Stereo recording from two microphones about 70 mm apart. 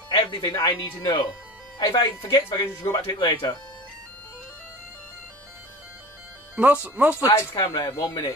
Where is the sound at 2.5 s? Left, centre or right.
Left.